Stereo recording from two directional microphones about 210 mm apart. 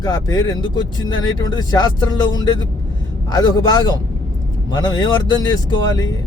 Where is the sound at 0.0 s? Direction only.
20° left (ahead or behind).